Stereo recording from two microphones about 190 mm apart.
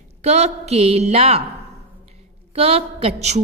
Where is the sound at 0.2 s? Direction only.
35° right (ahead or behind).